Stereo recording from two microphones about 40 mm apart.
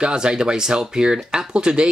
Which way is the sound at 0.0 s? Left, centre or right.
Centre.